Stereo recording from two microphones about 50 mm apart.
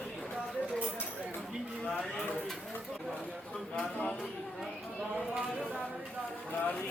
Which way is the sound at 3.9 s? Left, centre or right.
Left.